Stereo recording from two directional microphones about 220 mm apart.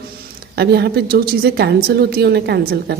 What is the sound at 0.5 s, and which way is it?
A woman's voice, 45° right (ahead or behind).